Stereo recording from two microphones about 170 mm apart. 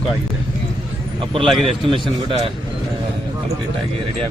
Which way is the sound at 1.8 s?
30° right (ahead or behind).